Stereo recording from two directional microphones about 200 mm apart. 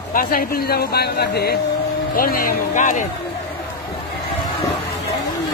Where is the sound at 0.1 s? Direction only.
45° left (ahead or behind).